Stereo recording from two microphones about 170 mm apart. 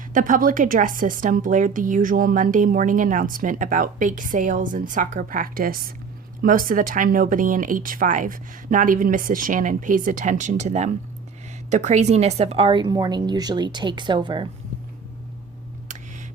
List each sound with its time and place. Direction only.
0.1 s a woman's voice: 50° right (ahead or behind); by 14.4 s 25° right (ahead or behind)